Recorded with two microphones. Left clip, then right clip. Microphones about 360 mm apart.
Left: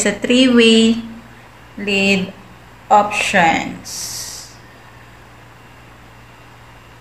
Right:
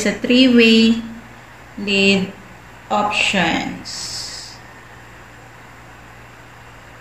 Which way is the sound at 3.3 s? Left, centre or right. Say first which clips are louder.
Left 5 dB; centre.